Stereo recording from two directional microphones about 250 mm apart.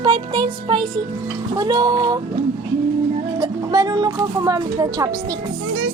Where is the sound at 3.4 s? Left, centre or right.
Centre.